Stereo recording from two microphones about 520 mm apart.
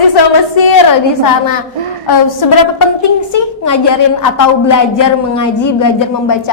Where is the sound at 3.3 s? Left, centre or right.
Left.